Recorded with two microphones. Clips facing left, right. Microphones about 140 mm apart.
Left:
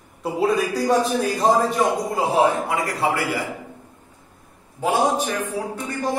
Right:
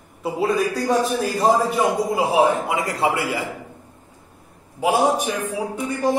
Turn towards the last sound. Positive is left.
turn(degrees=-10)  # may be behind; listen again after turning